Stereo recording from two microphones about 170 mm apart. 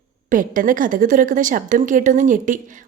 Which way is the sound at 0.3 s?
50° right (ahead or behind).